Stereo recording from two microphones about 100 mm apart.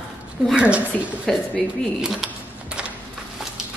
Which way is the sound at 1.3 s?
5° left (ahead or behind).